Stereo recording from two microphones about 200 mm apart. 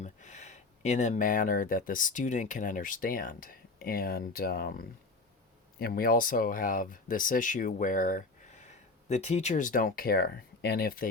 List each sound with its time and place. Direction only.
0.0 s speech: 35° left (ahead or behind)